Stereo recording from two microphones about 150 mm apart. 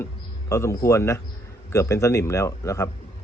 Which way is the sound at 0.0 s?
20° left (ahead or behind).